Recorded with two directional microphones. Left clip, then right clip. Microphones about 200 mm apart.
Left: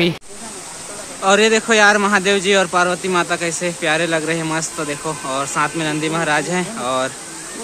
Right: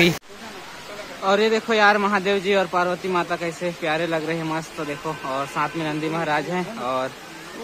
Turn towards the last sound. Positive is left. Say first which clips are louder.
# left 5 dB
turn(degrees=0)  # may be behind; listen again after turning